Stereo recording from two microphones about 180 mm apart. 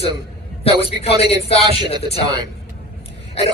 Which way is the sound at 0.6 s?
35° left (ahead or behind).